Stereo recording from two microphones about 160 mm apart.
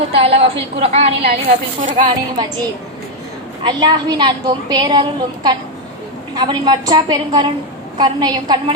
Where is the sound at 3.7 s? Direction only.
25° right (ahead or behind).